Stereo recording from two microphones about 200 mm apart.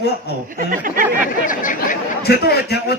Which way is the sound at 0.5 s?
45° right (ahead or behind).